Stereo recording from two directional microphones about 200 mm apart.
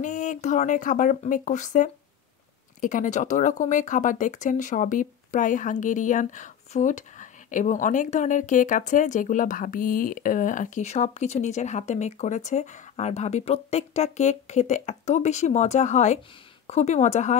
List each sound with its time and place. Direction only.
0.0 s speech: 40° left (ahead or behind)